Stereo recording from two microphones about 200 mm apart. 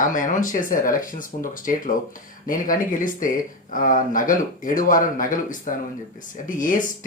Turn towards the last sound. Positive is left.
turn(degrees=40)  # may be behind; listen again after turning